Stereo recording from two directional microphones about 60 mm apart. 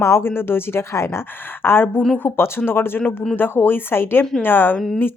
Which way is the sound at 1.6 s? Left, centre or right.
Left.